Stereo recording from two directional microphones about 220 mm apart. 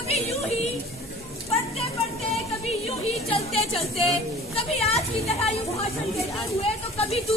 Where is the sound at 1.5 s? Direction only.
30° left (ahead or behind).